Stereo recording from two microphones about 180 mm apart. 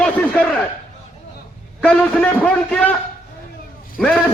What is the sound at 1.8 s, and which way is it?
A man's voice, 5° left (ahead or behind).